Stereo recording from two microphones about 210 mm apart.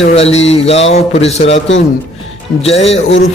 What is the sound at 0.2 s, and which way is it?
Speech, 30° left (ahead or behind).